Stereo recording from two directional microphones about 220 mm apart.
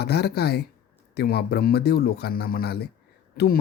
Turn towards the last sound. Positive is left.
turn(degrees=45)  # may be behind; listen again after turning